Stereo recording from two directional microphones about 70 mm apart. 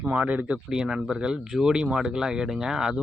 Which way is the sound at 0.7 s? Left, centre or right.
Centre.